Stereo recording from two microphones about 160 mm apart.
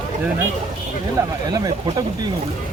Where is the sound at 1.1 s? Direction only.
25° right (ahead or behind).